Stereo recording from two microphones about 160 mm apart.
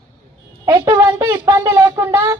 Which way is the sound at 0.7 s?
20° right (ahead or behind).